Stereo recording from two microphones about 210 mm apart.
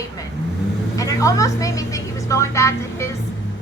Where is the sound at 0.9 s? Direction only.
15° left (ahead or behind).